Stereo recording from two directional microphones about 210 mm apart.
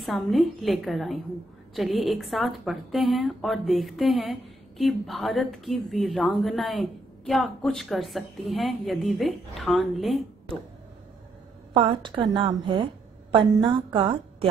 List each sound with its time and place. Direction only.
0.0 s a woman's voice: centre (ahead or behind)
11.7 s a woman's voice: 25° right (ahead or behind)